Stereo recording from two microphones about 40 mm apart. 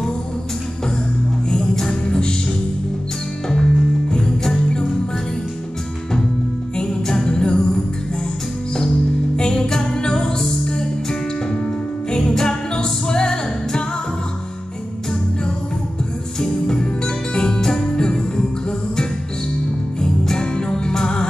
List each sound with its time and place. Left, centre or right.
1.5 s music: centre
3.4 s music: centre
6.8 s music: centre
7.2 s music: left
9.4 s music: centre
16.3 s music: centre
20.0 s music: centre